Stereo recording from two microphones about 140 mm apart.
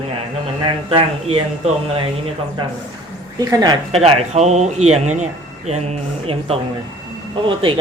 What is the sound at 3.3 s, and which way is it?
Speech, 25° right (ahead or behind).